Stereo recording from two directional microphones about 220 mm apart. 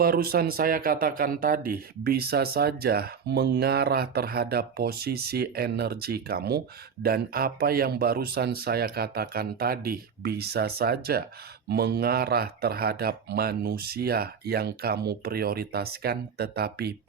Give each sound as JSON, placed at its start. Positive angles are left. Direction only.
{"t": 0.0, "sound": "speech", "side_deg": -45}